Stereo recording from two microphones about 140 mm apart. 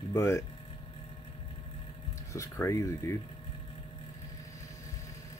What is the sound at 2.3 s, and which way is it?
Speech, 20° left (ahead or behind).